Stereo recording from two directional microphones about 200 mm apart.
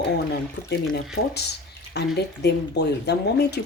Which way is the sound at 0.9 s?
55° left (ahead or behind).